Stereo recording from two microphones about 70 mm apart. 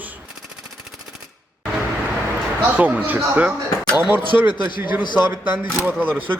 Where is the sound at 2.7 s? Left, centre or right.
Right.